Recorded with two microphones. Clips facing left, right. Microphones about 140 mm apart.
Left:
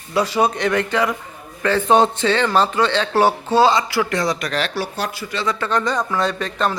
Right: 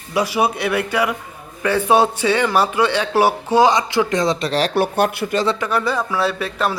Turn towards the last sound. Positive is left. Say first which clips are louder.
# right 1 dB
turn(degrees=-5)  # may be behind; listen again after turning